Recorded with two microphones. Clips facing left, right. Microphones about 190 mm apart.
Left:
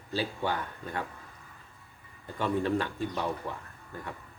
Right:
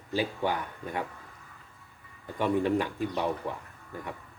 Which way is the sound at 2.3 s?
15° right (ahead or behind).